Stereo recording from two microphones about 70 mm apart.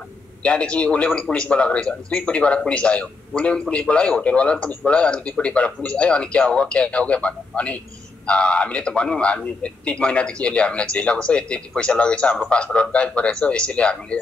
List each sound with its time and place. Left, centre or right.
0.4 s a man's voice: centre